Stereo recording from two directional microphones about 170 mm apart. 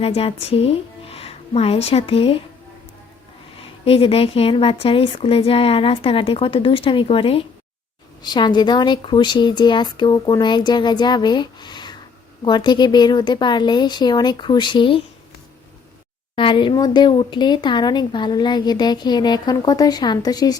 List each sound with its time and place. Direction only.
0.0 s a woman's voice: 35° left (ahead or behind)
3.8 s speech: 35° left (ahead or behind)
16.3 s speech: 30° left (ahead or behind)